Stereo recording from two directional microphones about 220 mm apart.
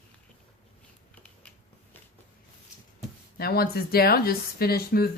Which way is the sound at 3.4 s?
45° left (ahead or behind).